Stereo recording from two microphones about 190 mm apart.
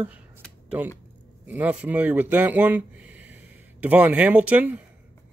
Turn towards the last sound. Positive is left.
turn(degrees=-10)  # may be behind; listen again after turning